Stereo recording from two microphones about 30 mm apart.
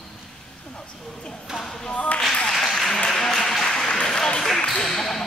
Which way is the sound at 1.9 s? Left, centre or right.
Left.